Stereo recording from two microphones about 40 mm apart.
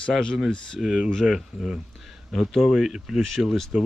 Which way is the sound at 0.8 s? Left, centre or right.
Centre.